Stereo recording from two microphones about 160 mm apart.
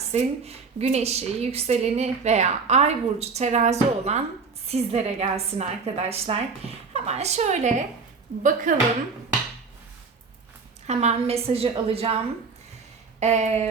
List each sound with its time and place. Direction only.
0.0 s a woman's voice: 40° right (ahead or behind)
10.8 s a woman's voice: 45° right (ahead or behind)